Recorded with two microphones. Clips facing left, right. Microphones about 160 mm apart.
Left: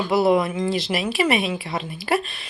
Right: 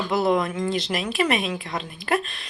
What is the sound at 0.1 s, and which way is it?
Speech, 10° left (ahead or behind).